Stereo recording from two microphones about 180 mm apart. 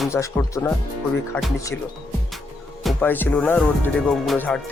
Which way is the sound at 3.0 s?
10° left (ahead or behind).